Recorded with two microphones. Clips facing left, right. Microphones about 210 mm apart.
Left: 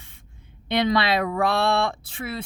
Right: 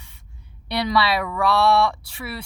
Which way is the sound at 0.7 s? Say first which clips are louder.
Left 1 dB; 20° left (ahead or behind).